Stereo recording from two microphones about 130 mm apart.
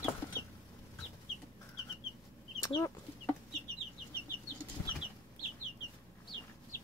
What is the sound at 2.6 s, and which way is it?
Speech, 25° left (ahead or behind).